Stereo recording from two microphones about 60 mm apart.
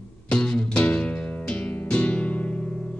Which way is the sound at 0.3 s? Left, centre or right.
Centre.